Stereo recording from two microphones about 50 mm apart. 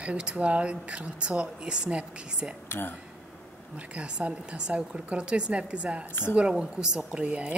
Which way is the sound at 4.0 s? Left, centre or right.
Right.